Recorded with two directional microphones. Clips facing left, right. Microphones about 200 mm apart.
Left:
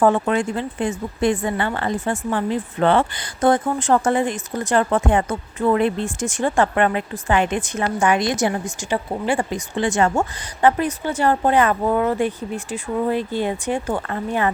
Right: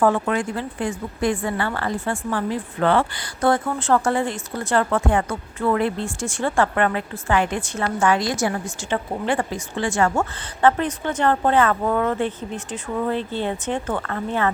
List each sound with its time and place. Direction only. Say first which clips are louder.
0.0 s a woman's voice: left 2 dB; 25° left (ahead or behind)
8.8 s a woman's voice: left 1 dB; 10° left (ahead or behind)